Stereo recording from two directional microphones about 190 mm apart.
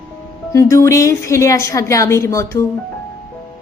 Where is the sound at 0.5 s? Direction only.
15° left (ahead or behind).